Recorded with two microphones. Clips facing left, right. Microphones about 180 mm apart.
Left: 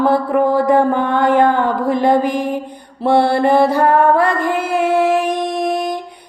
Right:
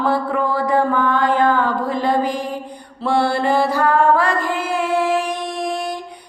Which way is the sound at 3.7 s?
55° left (ahead or behind).